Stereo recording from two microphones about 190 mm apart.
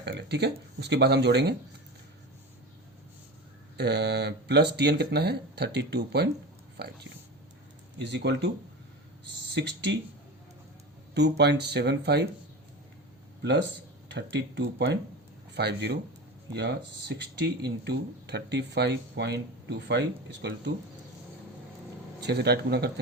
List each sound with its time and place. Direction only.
0.0 s speech: 60° right (ahead or behind)
3.8 s speech: 60° right (ahead or behind)
7.9 s speech: 65° right (ahead or behind)
9.6 s speech: 65° right (ahead or behind)
11.1 s speech: 65° right (ahead or behind)
14.1 s speech: 65° right (ahead or behind)
22.2 s speech: 60° right (ahead or behind)